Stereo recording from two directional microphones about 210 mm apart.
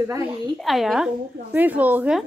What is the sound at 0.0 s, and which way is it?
Speech, 15° right (ahead or behind).